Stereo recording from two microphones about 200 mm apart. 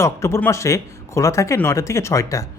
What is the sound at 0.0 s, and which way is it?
A man's voice, 15° left (ahead or behind).